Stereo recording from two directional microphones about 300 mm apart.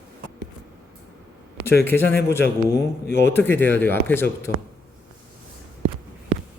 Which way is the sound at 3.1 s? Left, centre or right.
Left.